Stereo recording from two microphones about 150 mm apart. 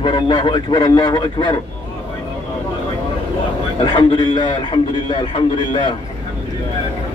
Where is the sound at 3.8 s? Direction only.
35° left (ahead or behind).